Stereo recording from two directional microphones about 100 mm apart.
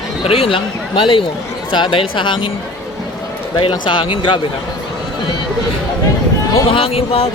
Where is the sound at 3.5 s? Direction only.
55° left (ahead or behind).